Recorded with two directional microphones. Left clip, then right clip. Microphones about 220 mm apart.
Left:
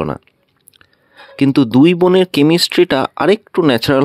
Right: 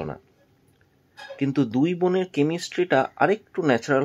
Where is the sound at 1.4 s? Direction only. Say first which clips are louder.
Left 12 dB; 45° left (ahead or behind).